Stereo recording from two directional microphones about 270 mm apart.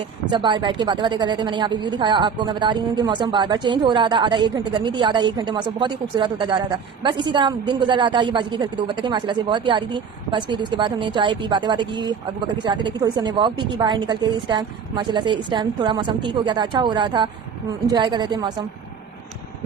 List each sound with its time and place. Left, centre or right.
0.3 s a woman's voice: centre